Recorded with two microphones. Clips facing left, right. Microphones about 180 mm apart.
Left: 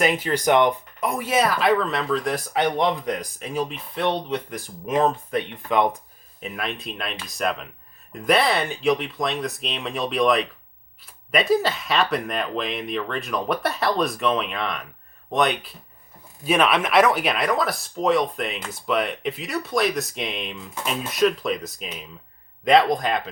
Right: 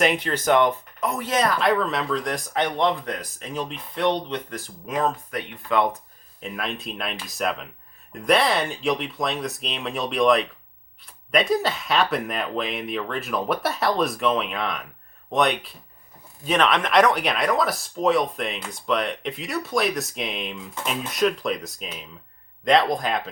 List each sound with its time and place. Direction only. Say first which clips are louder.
0.0 s speech: even; 5° left (ahead or behind)
0.3 s speech: left 2 dB; 15° left (ahead or behind)
4.9 s speech: left 4 dB; 25° left (ahead or behind)
6.4 s speech: even; centre (ahead or behind)